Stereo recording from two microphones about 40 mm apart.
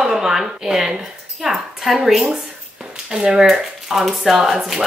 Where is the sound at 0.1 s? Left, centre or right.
Centre.